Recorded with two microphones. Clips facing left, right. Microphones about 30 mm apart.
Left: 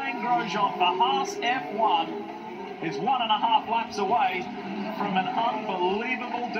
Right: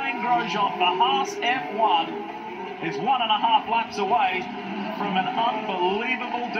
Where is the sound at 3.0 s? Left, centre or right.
Right; by 6.4 s centre.